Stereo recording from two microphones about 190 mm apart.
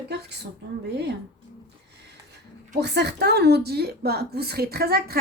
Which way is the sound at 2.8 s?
60° right (ahead or behind).